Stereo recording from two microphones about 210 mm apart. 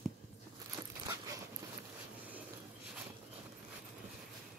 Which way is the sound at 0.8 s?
20° right (ahead or behind).